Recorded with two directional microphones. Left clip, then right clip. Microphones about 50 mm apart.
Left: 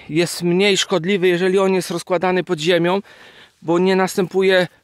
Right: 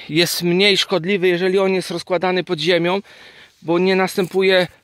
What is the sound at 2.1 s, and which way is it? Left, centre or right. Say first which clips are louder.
Speech: left 1 dB; left.